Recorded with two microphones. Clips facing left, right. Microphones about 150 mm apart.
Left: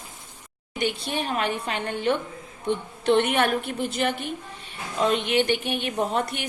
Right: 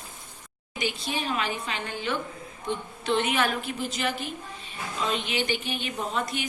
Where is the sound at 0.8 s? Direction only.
60° left (ahead or behind).